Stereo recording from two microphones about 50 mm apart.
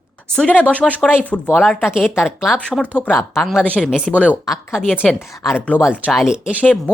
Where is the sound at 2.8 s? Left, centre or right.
Left.